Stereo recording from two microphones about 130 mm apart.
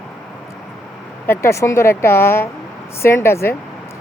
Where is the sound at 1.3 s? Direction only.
20° left (ahead or behind).